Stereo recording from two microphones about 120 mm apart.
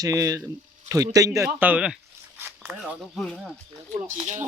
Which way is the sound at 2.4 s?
15° right (ahead or behind).